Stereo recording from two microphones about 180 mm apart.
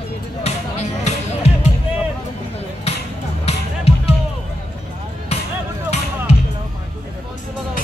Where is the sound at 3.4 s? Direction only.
35° left (ahead or behind).